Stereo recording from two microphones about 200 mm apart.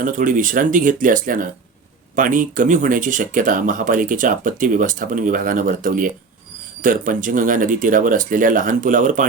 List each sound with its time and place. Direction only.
0.0 s speech: 40° right (ahead or behind)